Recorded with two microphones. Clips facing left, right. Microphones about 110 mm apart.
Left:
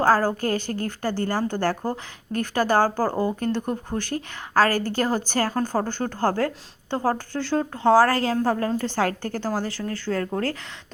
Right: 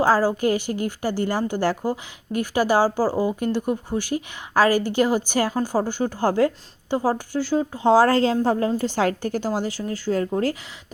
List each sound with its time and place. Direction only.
0.3 s a woman's voice: 15° right (ahead or behind)
7.8 s a woman's voice: 20° right (ahead or behind)